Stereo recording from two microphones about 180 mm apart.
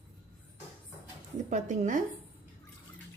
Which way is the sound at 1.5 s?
45° right (ahead or behind).